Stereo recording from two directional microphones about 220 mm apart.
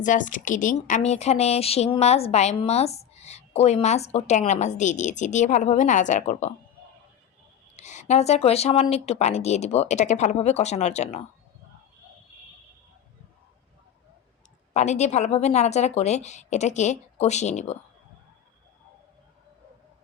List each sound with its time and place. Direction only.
0.0 s a woman's voice: 35° left (ahead or behind)
7.8 s a woman's voice: 30° left (ahead or behind)
14.7 s a woman's voice: 30° left (ahead or behind)